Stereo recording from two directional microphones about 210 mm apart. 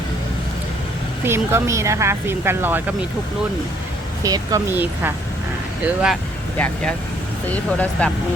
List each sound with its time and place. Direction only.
1.2 s speech: 10° right (ahead or behind)
4.2 s speech: 15° right (ahead or behind)
6.6 s speech: 5° left (ahead or behind)